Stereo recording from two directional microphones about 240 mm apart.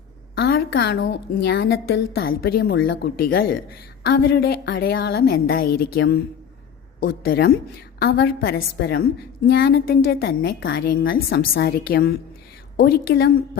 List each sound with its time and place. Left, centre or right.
0.3 s a woman's voice: left
7.0 s a woman's voice: left